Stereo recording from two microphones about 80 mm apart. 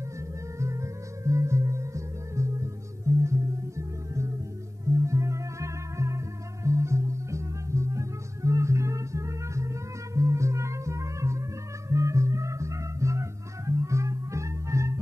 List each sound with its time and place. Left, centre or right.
0.6 s music: right